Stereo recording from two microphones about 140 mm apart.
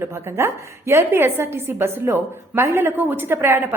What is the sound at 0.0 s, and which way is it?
A woman's voice, 20° right (ahead or behind).